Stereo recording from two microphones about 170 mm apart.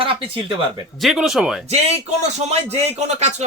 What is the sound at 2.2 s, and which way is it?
Speech, 40° right (ahead or behind).